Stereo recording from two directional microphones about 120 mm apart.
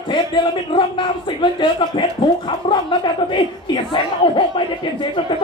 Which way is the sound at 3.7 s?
45° left (ahead or behind).